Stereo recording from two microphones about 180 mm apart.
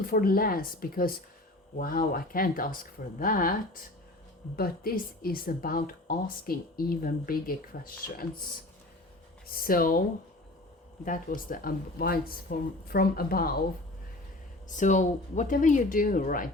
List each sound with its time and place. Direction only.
0.1 s speech: 55° left (ahead or behind)
4.5 s speech: 55° left (ahead or behind)
9.5 s speech: 55° left (ahead or behind)
11.0 s speech: 45° left (ahead or behind)
14.8 s speech: 45° left (ahead or behind)